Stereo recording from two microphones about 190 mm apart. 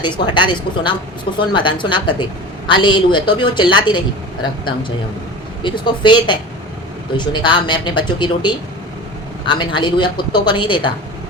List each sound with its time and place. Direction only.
0.0 s speech: 25° left (ahead or behind)
5.6 s speech: 25° left (ahead or behind)